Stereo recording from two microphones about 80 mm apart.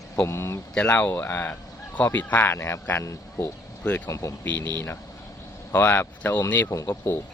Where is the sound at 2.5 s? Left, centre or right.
Left.